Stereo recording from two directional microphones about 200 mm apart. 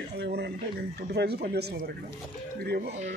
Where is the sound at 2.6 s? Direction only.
50° right (ahead or behind).